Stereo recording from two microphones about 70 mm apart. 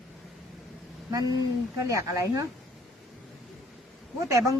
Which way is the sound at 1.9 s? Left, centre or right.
Right.